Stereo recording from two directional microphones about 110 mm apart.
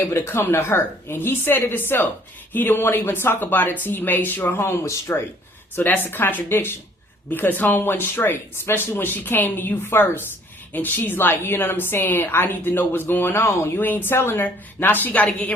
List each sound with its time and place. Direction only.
0.0 s a woman's voice: 25° left (ahead or behind)